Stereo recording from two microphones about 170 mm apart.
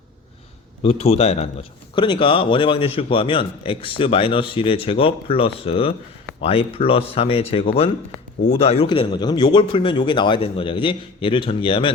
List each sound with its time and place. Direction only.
0.8 s a man's voice: 35° left (ahead or behind)